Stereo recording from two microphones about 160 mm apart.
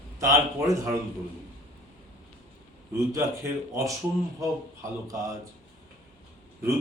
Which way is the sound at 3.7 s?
20° right (ahead or behind).